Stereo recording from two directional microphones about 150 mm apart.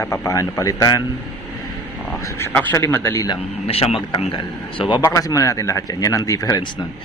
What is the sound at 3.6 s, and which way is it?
Speech, 40° left (ahead or behind).